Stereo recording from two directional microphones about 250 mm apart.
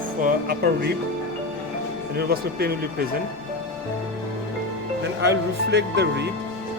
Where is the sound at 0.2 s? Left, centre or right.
Right.